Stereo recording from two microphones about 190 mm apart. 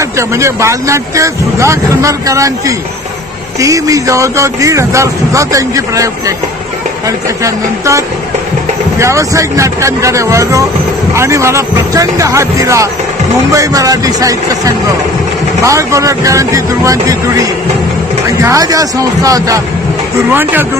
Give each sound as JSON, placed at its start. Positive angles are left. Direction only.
{"t": 0.4, "sound": "speech", "side_deg": -15}
{"t": 18.4, "sound": "speech", "side_deg": -15}